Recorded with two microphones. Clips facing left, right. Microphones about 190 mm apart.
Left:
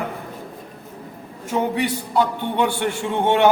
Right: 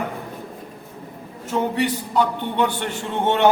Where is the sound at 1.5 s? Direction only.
10° left (ahead or behind).